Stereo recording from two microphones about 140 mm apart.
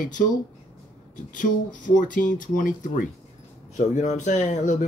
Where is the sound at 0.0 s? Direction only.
70° left (ahead or behind).